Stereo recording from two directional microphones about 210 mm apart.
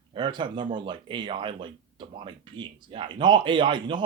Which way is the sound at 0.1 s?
20° right (ahead or behind).